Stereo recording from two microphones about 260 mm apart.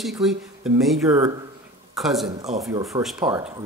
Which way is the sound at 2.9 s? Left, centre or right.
Centre.